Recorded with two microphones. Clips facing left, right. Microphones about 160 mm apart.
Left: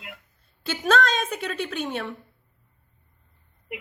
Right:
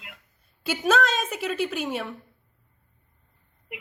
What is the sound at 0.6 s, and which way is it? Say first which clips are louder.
A woman's voice: even; 10° right (ahead or behind).